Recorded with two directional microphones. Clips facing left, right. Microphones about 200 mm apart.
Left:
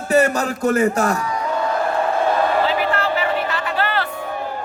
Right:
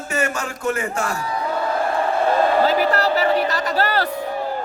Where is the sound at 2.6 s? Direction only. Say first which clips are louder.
Right 2 dB; 40° right (ahead or behind).